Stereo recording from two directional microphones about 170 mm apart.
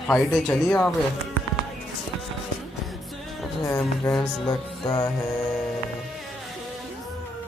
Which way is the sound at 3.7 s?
15° left (ahead or behind).